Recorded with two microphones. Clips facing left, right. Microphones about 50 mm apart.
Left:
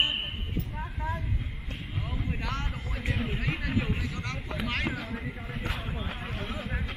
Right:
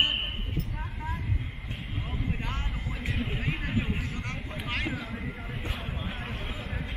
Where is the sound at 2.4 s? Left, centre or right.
Right.